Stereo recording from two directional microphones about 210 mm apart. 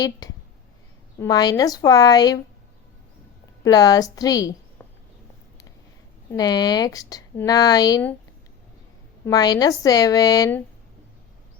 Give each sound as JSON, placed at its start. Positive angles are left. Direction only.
{"t": 1.2, "sound": "speech", "side_deg": 20}
{"t": 3.6, "sound": "a woman's voice", "side_deg": 20}
{"t": 6.3, "sound": "speech", "side_deg": 20}
{"t": 9.2, "sound": "speech", "side_deg": 20}